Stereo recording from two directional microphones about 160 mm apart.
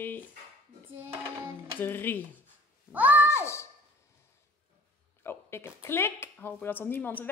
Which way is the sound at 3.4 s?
15° left (ahead or behind).